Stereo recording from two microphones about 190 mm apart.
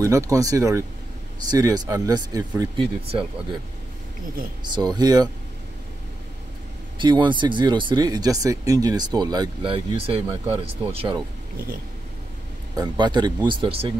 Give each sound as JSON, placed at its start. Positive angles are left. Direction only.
{"t": 0.0, "sound": "speech", "side_deg": -15}
{"t": 4.6, "sound": "speech", "side_deg": -20}
{"t": 7.0, "sound": "speech", "side_deg": -25}
{"t": 12.7, "sound": "speech", "side_deg": -25}